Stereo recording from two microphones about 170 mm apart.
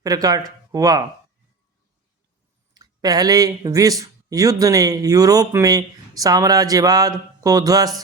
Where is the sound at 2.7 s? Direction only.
20° right (ahead or behind).